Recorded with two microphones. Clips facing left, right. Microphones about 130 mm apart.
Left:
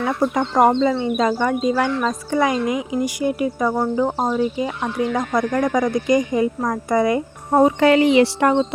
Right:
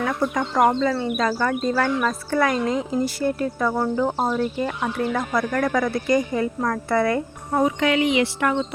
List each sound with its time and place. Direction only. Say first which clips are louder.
0.2 s speech: left 4 dB; 25° left (ahead or behind)
7.5 s speech: left 6 dB; 35° left (ahead or behind)